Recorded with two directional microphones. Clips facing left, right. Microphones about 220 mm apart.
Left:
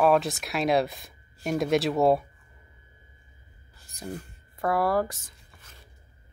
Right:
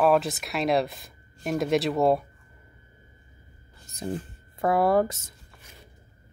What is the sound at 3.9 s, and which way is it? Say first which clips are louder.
Speech: right 5 dB; 25° right (ahead or behind).